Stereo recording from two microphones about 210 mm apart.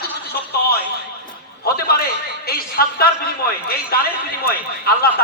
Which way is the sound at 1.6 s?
45° left (ahead or behind).